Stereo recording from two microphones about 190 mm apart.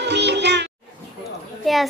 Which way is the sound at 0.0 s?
65° right (ahead or behind).